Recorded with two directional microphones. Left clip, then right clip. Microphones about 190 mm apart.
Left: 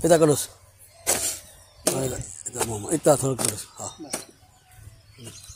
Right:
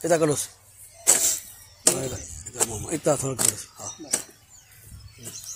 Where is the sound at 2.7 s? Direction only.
35° left (ahead or behind).